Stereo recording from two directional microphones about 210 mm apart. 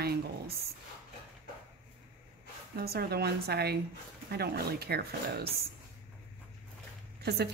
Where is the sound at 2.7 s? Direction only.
50° right (ahead or behind).